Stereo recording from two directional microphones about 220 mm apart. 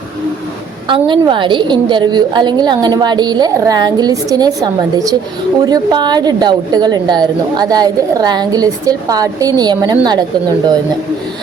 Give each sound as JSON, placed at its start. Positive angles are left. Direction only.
{"t": 0.9, "sound": "a woman's voice", "side_deg": -20}